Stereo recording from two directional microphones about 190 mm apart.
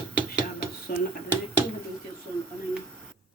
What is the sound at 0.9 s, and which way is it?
Speech, 50° left (ahead or behind).